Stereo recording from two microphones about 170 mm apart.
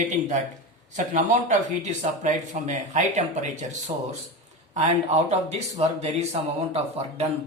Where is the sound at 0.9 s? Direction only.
45° right (ahead or behind).